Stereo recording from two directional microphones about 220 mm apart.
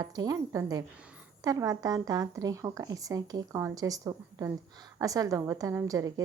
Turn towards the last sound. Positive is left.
turn(degrees=-15)  # may be behind; listen again after turning